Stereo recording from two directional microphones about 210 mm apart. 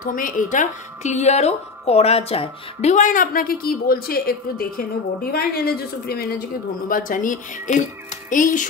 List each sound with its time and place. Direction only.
0.0 s a woman's voice: 40° left (ahead or behind)